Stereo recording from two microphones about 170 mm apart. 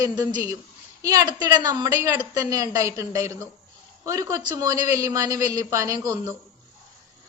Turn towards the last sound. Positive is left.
turn(degrees=-20)  # may be behind; listen again after turning